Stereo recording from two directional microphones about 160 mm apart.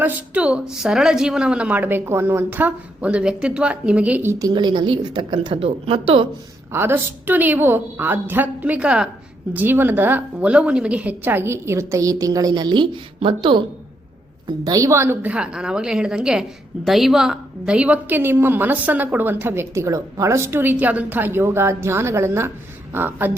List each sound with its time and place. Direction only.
0.0 s a woman's voice: 10° right (ahead or behind); by 6.2 s 35° right (ahead or behind)
6.7 s a woman's voice: 15° right (ahead or behind); by 13.6 s 30° right (ahead or behind)
14.6 s a woman's voice: 20° right (ahead or behind)